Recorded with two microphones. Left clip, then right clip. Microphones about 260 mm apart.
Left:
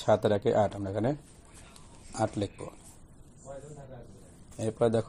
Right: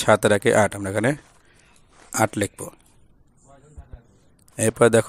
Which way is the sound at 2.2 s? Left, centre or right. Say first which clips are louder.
Right 9 dB; right.